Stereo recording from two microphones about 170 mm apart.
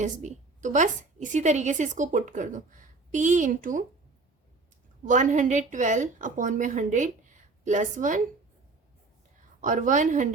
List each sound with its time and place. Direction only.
0.0 s a woman's voice: 45° right (ahead or behind)
5.0 s a woman's voice: 45° right (ahead or behind)
9.6 s a woman's voice: 50° right (ahead or behind)